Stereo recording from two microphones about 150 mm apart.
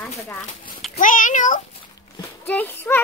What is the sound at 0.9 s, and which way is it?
Speech, 60° left (ahead or behind).